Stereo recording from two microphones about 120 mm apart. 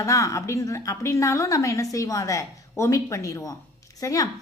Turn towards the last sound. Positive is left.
turn(degrees=30)  # may be behind; listen again after turning